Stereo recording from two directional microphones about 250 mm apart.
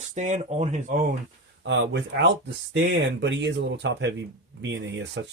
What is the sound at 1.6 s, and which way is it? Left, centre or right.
Speech, right.